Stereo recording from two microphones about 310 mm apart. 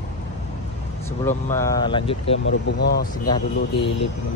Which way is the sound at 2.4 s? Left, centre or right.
Left.